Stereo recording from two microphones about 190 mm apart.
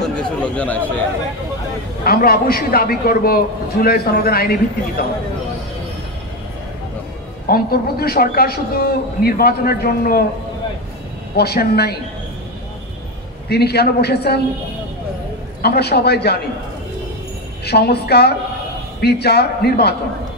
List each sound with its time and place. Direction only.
0.0 s a sound: 5° left (ahead or behind)
2.0 s a man's voice: 55° left (ahead or behind)
7.4 s a man's voice: 50° left (ahead or behind)
11.3 s a man's voice: 55° left (ahead or behind)
13.5 s a man's voice: 55° left (ahead or behind)
15.6 s a man's voice: 55° left (ahead or behind)
17.6 s a man's voice: 55° left (ahead or behind)